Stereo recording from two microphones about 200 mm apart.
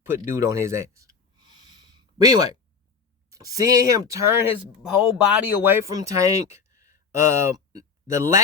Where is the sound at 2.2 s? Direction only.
20° right (ahead or behind).